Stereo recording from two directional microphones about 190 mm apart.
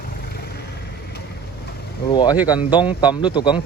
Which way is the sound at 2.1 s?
25° left (ahead or behind).